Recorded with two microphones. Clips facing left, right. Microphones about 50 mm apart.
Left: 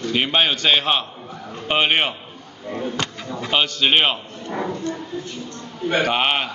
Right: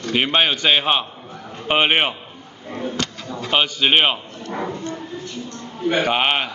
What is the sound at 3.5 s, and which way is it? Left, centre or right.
Speech, centre.